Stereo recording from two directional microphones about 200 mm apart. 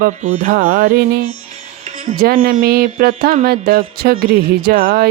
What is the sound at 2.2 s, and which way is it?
Speech, 50° right (ahead or behind).